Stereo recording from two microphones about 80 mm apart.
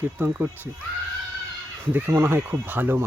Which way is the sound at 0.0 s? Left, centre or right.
Right.